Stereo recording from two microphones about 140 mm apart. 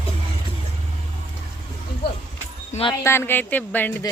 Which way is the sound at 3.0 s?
15° left (ahead or behind).